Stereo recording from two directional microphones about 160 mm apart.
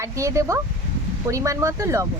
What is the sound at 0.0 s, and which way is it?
Speech, 20° right (ahead or behind).